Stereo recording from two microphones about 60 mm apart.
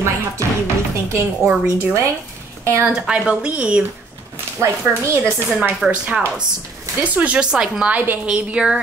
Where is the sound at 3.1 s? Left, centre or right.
Right.